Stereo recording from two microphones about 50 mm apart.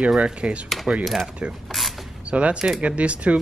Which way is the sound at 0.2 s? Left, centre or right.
Right.